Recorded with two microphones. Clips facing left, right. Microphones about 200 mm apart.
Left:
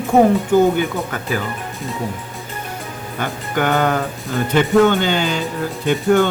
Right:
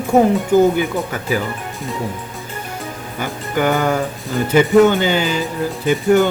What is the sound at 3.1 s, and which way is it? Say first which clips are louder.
Speech: right 1 dB; 10° right (ahead or behind).